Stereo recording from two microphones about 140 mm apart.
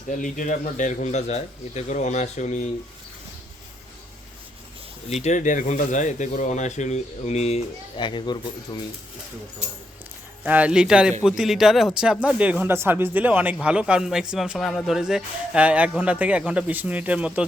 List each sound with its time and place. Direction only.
0.1 s a man's voice: 70° left (ahead or behind)
5.2 s a man's voice: 60° left (ahead or behind)
7.9 s speech: 35° left (ahead or behind)
10.4 s a man's voice: 10° right (ahead or behind)